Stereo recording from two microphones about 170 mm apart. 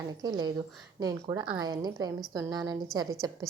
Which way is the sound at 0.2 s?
25° right (ahead or behind).